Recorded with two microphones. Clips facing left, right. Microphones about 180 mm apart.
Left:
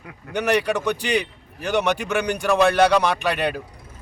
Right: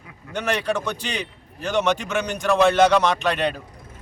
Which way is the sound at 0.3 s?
15° left (ahead or behind).